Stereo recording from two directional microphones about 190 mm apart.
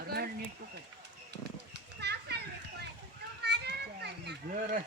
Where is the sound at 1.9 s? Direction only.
60° right (ahead or behind).